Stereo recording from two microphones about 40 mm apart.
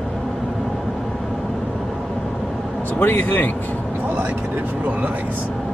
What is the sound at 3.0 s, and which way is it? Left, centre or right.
Speech, left.